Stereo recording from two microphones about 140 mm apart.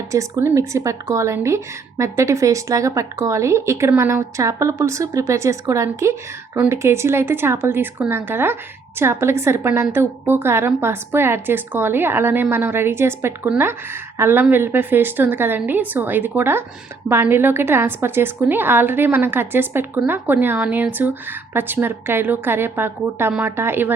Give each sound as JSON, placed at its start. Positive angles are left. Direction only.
{"t": 0.1, "sound": "a woman's voice", "side_deg": -20}